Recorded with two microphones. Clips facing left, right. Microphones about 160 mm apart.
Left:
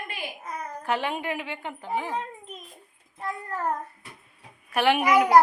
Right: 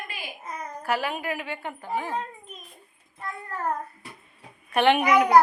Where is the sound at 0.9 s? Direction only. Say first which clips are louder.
Even; 25° left (ahead or behind).